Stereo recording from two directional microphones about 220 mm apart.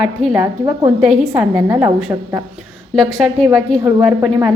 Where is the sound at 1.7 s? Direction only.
15° right (ahead or behind).